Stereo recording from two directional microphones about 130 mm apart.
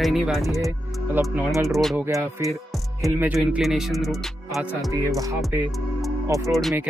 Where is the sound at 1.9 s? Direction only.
20° right (ahead or behind).